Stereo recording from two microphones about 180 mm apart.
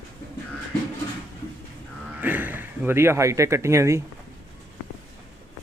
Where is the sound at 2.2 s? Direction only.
10° right (ahead or behind).